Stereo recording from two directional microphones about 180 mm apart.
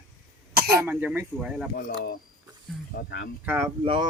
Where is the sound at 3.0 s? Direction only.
60° left (ahead or behind).